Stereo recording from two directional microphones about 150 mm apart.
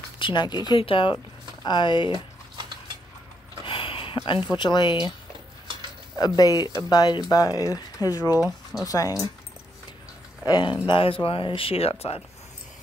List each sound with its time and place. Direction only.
0.2 s speech: 30° left (ahead or behind)
3.6 s a sound: 35° left (ahead or behind)
4.5 s speech: 30° left (ahead or behind)
6.1 s speech: 25° left (ahead or behind)
8.3 s speech: 15° right (ahead or behind)
8.8 s speech: 25° left (ahead or behind)
10.4 s speech: 30° left (ahead or behind)